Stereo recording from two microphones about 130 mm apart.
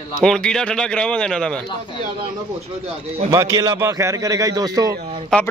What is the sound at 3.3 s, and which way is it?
A man's voice, 25° right (ahead or behind).